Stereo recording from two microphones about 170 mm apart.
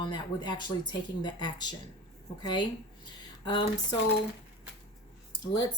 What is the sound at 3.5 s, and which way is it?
Speech, 25° left (ahead or behind).